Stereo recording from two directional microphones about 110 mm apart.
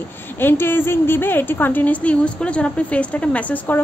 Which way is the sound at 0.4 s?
20° left (ahead or behind).